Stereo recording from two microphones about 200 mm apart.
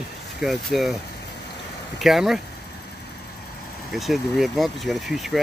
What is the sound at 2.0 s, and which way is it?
Speech, centre (ahead or behind).